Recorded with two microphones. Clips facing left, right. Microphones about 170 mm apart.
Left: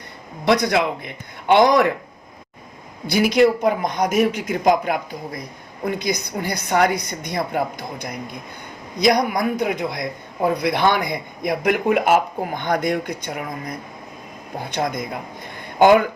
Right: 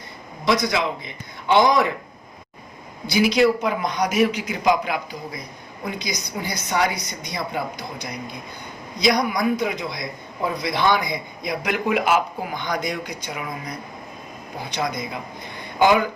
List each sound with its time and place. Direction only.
0.4 s a man's voice: 60° left (ahead or behind)
3.1 s a man's voice: 50° left (ahead or behind)